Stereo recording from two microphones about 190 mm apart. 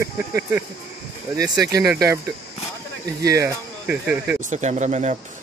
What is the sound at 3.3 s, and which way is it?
Speech, 10° right (ahead or behind).